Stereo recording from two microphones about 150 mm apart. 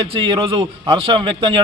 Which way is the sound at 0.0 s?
35° right (ahead or behind).